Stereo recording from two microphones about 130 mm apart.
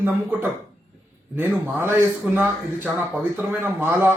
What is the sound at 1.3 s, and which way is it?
A man's voice, 10° right (ahead or behind).